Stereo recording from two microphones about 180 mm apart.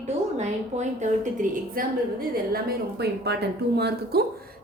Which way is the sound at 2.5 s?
65° right (ahead or behind).